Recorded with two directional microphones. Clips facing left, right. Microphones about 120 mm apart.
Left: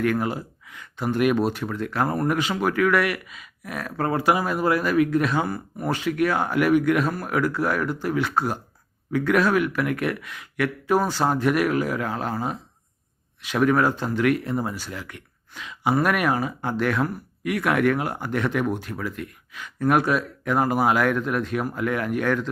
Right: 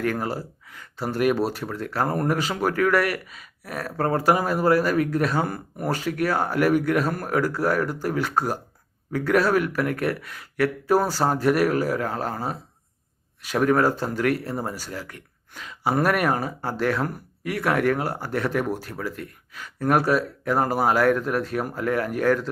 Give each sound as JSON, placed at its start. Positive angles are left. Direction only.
{"t": 0.0, "sound": "speech", "side_deg": -35}